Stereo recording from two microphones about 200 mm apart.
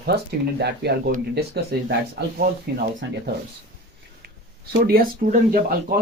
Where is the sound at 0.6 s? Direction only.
55° right (ahead or behind).